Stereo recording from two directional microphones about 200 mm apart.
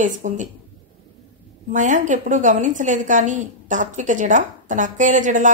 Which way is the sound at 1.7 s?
40° right (ahead or behind).